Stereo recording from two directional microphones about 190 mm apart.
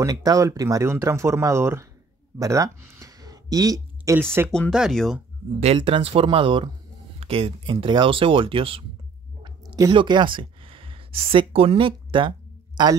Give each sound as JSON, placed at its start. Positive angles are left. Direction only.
{"t": 0.0, "sound": "speech", "side_deg": -20}
{"t": 4.5, "sound": "speech", "side_deg": 0}
{"t": 5.6, "sound": "speech", "side_deg": -30}
{"t": 9.4, "sound": "a sound", "side_deg": -20}